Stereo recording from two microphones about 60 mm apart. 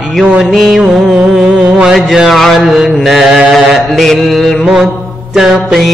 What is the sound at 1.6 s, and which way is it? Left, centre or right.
Mantra, centre.